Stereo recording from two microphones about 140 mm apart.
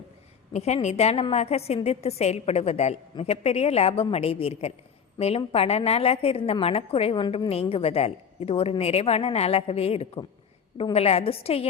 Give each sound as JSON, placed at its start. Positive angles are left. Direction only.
{"t": 0.5, "sound": "a woman's voice", "side_deg": 50}